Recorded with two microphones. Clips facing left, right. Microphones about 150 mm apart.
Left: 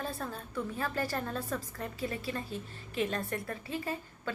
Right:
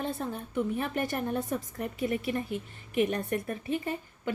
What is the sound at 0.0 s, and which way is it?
A woman's voice, 20° right (ahead or behind).